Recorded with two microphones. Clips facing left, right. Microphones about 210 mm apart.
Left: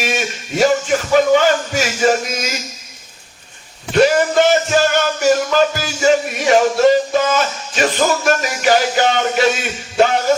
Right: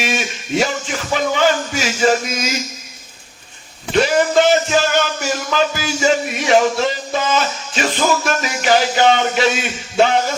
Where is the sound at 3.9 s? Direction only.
50° left (ahead or behind).